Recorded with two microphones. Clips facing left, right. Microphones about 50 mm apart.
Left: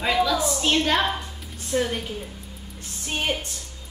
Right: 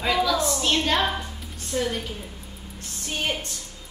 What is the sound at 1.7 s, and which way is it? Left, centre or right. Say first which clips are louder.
Speech: left 2 dB; centre.